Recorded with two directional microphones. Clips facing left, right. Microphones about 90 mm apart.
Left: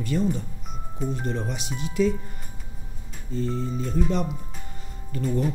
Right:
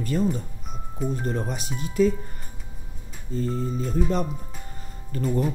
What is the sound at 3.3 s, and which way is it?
Speech, 40° right (ahead or behind).